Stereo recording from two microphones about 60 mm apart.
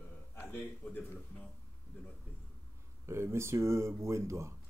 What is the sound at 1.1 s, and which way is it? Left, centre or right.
Speech, left.